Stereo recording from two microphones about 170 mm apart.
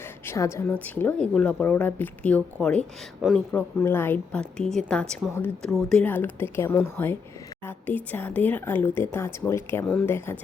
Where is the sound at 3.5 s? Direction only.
10° left (ahead or behind).